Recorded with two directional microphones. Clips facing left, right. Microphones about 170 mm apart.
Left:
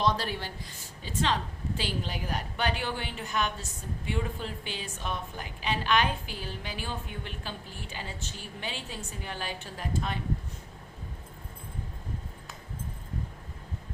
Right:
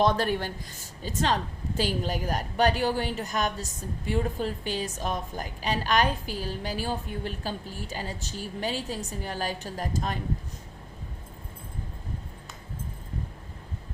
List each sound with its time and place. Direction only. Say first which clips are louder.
0.0 s a woman's voice: right 5 dB; 50° right (ahead or behind)